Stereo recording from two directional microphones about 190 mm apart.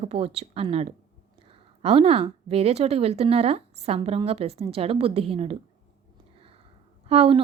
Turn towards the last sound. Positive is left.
turn(degrees=-30)  # may be behind; listen again after turning